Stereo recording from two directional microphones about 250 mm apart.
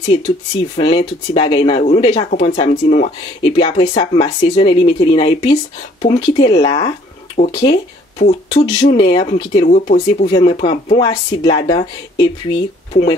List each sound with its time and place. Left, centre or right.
0.7 s speech: left